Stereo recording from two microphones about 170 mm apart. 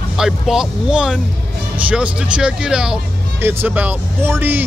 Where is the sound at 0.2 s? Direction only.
5° right (ahead or behind).